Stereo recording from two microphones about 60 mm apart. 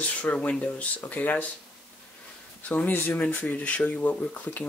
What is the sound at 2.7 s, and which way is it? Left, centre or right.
Speech, left.